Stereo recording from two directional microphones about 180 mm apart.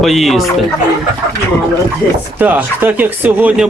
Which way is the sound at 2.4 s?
10° right (ahead or behind).